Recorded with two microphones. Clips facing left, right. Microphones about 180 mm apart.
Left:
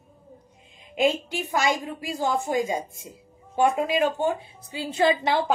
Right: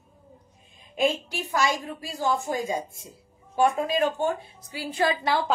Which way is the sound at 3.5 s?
15° left (ahead or behind).